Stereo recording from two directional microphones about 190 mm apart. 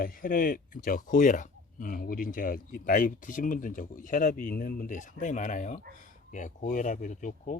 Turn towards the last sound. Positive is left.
turn(degrees=40)  # may be behind; listen again after turning